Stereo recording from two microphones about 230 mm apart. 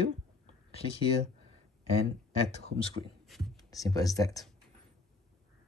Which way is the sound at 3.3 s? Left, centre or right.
Centre.